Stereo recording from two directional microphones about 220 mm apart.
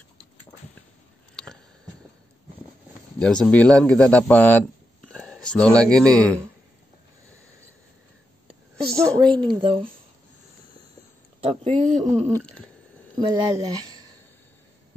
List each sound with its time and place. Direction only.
3.2 s a man's voice: 5° left (ahead or behind)
8.9 s speech: 15° right (ahead or behind)
11.4 s speech: 25° right (ahead or behind)
13.2 s speech: 15° right (ahead or behind)